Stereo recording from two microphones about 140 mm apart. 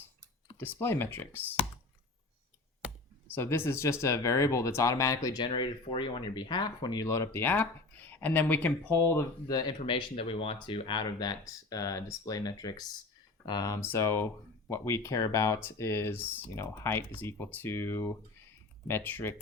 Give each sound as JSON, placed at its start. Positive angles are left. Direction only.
{"t": 0.5, "sound": "speech", "side_deg": 15}
{"t": 3.2, "sound": "speech", "side_deg": 15}
{"t": 5.5, "sound": "speech", "side_deg": 35}